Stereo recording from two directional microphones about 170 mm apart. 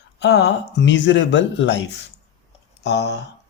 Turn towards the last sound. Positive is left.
turn(degrees=85)